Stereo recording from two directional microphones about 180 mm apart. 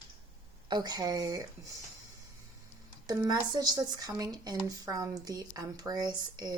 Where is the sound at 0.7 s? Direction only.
20° right (ahead or behind).